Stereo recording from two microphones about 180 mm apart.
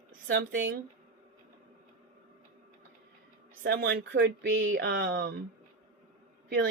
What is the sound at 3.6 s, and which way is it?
Speech, 65° right (ahead or behind).